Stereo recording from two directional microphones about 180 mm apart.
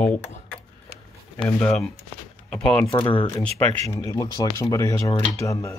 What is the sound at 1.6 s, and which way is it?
Speech, 5° left (ahead or behind).